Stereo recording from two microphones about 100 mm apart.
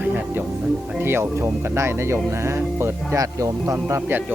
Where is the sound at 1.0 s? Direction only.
25° right (ahead or behind).